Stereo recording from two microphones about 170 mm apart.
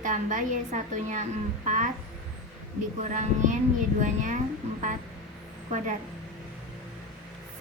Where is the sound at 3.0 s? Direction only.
45° right (ahead or behind).